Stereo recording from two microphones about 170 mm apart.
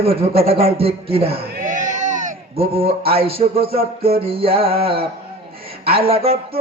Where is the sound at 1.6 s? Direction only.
50° right (ahead or behind).